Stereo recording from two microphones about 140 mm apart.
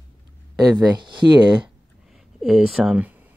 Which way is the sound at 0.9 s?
35° right (ahead or behind).